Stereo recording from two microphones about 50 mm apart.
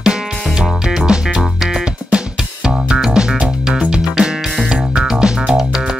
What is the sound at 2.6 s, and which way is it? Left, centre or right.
Music, centre.